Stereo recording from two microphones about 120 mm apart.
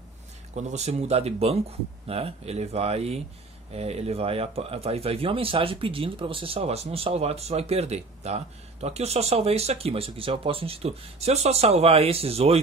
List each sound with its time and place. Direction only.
0.6 s speech: 70° right (ahead or behind)